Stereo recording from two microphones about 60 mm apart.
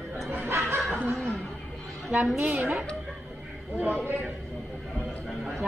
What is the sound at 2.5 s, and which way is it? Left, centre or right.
Speech, right.